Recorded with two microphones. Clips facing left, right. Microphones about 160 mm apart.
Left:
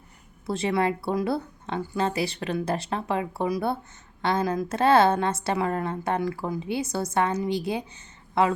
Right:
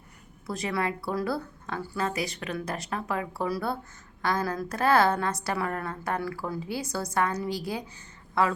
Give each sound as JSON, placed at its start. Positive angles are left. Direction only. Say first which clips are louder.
{"t": 0.4, "sound": "a woman's voice", "louder": "left 5 dB", "side_deg": 25}